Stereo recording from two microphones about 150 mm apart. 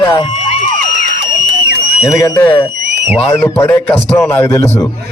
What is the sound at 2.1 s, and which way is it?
Speech, 20° left (ahead or behind).